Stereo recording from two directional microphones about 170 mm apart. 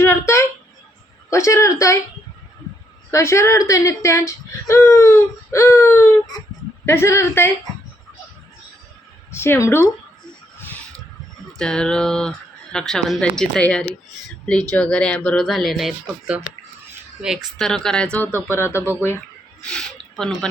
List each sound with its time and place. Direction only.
0.0 s a sound: 15° left (ahead or behind)
1.3 s speech: 15° left (ahead or behind)
3.1 s speech: 15° left (ahead or behind)
9.3 s speech: 15° left (ahead or behind)
10.6 s a sound: 10° left (ahead or behind)
11.5 s speech: 5° left (ahead or behind)
19.6 s speech: 5° left (ahead or behind)